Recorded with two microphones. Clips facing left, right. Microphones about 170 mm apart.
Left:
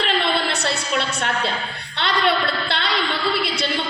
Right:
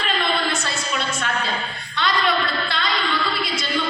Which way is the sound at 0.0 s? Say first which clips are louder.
Left 3 dB; 70° left (ahead or behind).